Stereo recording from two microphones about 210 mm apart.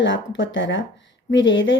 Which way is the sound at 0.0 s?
60° left (ahead or behind).